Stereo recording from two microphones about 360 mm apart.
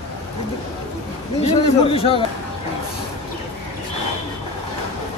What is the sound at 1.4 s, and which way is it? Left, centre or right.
Speech, centre.